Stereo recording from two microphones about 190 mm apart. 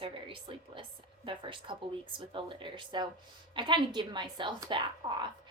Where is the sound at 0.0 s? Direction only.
25° right (ahead or behind).